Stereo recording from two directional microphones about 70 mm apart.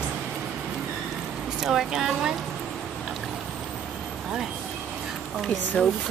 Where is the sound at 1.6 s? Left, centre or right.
Centre.